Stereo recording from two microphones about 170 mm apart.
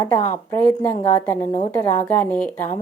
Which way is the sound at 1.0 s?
10° left (ahead or behind).